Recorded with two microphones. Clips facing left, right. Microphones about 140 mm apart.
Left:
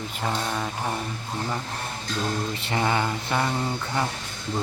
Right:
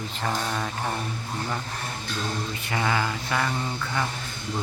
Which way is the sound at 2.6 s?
30° left (ahead or behind).